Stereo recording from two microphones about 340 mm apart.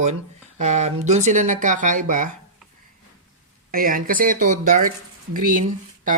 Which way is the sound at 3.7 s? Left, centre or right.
Right.